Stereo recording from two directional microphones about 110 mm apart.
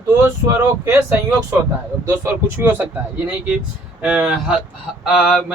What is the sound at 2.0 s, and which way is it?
A man's voice, 25° right (ahead or behind).